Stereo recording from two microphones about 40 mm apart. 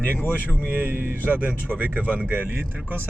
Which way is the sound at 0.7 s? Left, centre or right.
Right.